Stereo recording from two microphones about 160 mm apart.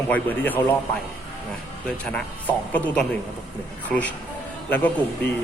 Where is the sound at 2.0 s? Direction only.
10° left (ahead or behind).